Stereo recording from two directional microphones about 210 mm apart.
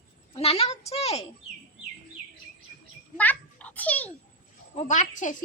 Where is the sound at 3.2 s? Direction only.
5° left (ahead or behind).